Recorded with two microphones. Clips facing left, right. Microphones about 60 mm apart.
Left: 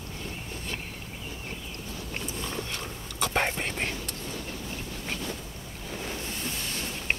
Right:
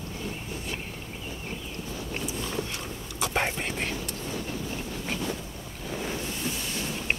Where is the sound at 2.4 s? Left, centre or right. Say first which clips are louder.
Right 2 dB; centre.